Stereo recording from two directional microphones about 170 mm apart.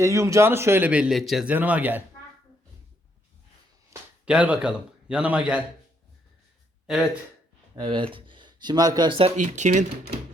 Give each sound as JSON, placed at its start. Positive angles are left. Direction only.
{"t": 0.0, "sound": "a man's voice", "side_deg": -20}
{"t": 3.9, "sound": "a sound", "side_deg": -20}
{"t": 4.3, "sound": "a man's voice", "side_deg": -5}
{"t": 6.8, "sound": "a man's voice", "side_deg": -5}
{"t": 7.8, "sound": "speech", "side_deg": -25}
{"t": 9.4, "sound": "speech", "side_deg": -45}